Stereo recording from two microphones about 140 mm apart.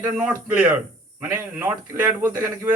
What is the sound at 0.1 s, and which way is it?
Speech, 10° right (ahead or behind).